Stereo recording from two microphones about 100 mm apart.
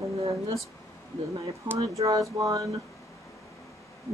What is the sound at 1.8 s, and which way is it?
Speech, 35° right (ahead or behind).